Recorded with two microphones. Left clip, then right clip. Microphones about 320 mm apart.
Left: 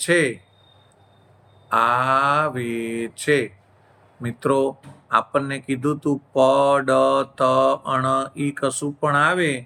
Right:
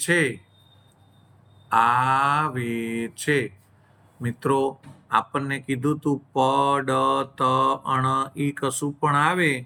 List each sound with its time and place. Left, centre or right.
0.0 s a man's voice: centre
1.7 s a man's voice: centre